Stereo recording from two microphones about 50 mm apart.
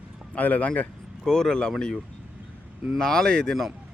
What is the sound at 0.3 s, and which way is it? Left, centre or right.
Speech, left.